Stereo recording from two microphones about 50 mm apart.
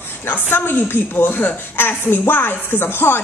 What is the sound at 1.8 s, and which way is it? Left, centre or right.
A woman's voice, left.